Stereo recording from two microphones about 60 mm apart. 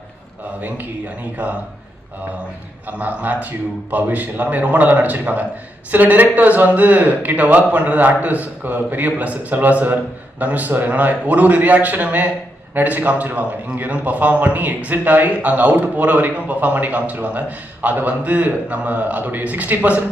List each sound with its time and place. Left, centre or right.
0.6 s a man's voice: right
3.0 s a man's voice: right